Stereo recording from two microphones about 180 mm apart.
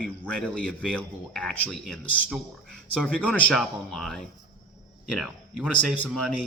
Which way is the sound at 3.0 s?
5° left (ahead or behind).